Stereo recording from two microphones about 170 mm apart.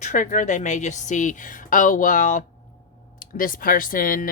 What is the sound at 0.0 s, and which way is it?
Speech, 45° left (ahead or behind).